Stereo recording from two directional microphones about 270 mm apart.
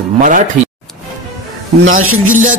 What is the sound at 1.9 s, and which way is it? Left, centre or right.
Speech, right.